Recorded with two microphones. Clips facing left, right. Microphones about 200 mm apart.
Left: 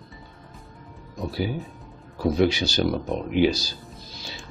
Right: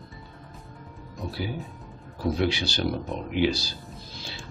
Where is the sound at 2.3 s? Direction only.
40° left (ahead or behind).